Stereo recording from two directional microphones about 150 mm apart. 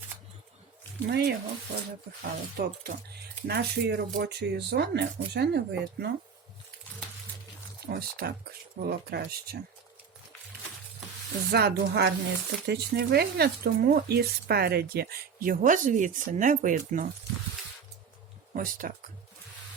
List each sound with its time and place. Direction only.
1.0 s speech: 90° right
7.9 s speech: 90° right
11.5 s speech: 90° right; by 17.1 s 65° right (ahead or behind)
18.5 s speech: 65° right (ahead or behind)